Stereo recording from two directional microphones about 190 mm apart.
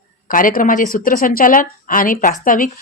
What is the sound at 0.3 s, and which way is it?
A woman's voice, 45° left (ahead or behind).